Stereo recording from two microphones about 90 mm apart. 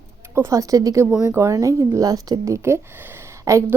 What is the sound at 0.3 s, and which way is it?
A woman's voice, 40° right (ahead or behind).